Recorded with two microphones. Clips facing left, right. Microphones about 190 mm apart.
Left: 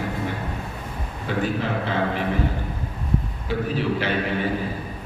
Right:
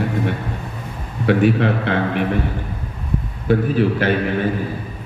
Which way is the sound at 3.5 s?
50° right (ahead or behind).